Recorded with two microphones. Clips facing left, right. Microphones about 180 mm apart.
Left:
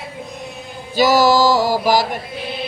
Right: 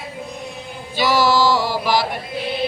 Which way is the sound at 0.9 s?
40° left (ahead or behind).